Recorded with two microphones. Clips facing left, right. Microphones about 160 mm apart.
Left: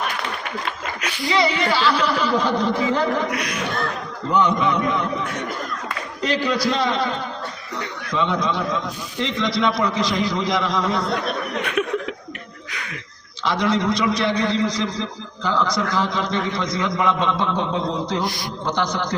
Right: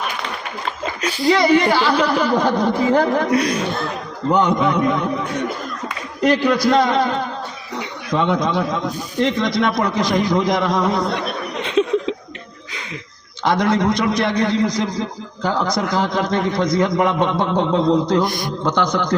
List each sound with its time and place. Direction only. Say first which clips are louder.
1.0 s a woman's voice: right 7 dB; 35° right (ahead or behind)
1.3 s a man's voice: right 6 dB; 45° right (ahead or behind)
3.2 s speech: right 8 dB; 30° right (ahead or behind)
4.3 s a man's voice: right 3 dB; 50° right (ahead or behind)
6.2 s a man's voice: right 6 dB; 55° right (ahead or behind)
11.6 s a sound: right 8 dB; 25° right (ahead or behind)
13.4 s a man's voice: right 4 dB; 50° right (ahead or behind)